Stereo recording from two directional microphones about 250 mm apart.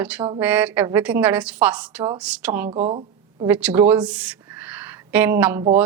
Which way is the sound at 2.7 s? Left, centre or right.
Right.